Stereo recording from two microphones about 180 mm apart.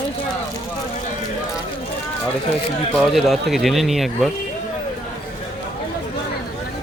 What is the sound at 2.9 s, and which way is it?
Speech, centre (ahead or behind).